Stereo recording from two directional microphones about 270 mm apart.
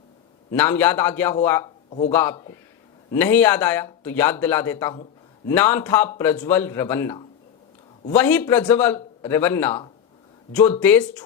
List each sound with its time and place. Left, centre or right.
0.5 s speech: centre